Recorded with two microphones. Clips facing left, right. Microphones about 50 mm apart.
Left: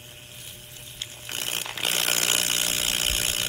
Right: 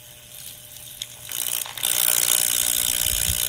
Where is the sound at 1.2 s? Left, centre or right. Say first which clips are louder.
Left 3 dB; left.